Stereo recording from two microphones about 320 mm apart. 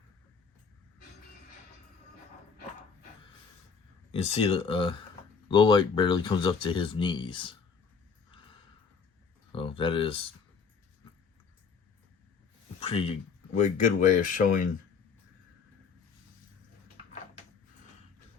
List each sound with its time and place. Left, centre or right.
4.1 s speech: centre
9.5 s a sound: centre
12.8 s speech: centre